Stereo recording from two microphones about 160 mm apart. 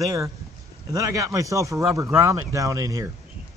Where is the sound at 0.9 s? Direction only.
20° right (ahead or behind).